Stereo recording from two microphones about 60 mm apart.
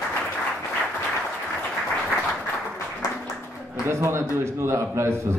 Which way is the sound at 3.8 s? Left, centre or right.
Right.